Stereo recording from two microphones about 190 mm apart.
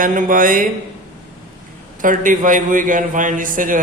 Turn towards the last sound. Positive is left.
turn(degrees=-45)  # may be behind; listen again after turning